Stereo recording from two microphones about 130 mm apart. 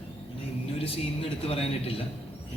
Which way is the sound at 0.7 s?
50° left (ahead or behind).